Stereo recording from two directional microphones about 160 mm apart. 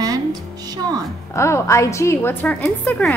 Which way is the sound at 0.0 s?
25° right (ahead or behind).